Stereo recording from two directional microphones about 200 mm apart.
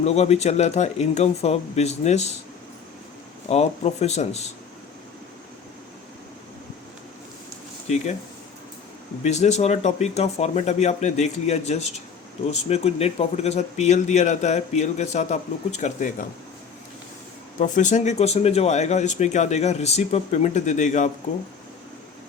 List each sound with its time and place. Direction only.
0.0 s speech: 30° left (ahead or behind)
3.5 s speech: 35° left (ahead or behind)
9.2 s speech: 35° left (ahead or behind)
17.6 s speech: 40° left (ahead or behind)